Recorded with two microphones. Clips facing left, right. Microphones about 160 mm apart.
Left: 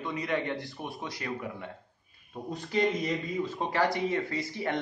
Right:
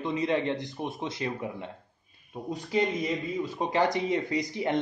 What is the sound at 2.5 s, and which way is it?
A man's voice, 10° right (ahead or behind).